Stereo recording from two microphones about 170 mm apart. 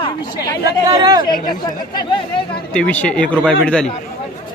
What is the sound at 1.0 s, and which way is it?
Speech, 25° right (ahead or behind).